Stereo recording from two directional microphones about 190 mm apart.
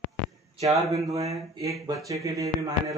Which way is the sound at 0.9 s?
15° right (ahead or behind).